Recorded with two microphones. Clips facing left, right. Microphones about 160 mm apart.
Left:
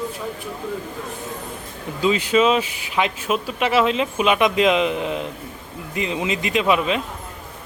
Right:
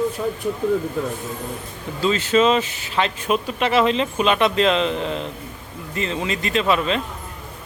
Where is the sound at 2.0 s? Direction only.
15° left (ahead or behind).